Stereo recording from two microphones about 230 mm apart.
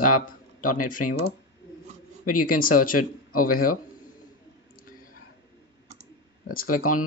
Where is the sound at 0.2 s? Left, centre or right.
Left.